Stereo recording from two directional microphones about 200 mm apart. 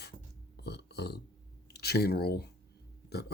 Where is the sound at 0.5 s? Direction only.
55° left (ahead or behind).